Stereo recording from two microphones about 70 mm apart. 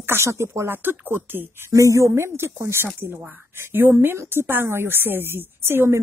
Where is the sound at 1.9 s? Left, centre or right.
Right.